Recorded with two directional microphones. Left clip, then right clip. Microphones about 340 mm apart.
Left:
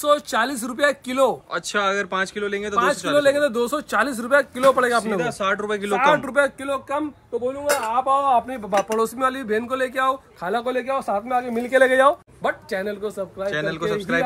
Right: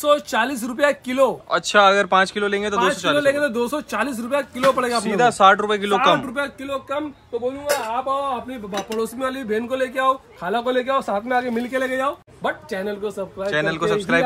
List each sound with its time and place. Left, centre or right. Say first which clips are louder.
0.0 s speech: right 1 dB; centre
7.6 s speech: left 3 dB; left
8.7 s speech: left 5 dB; centre